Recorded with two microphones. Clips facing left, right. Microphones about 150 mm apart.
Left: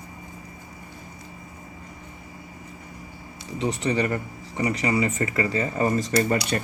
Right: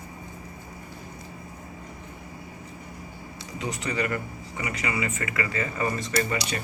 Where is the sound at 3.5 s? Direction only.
30° left (ahead or behind).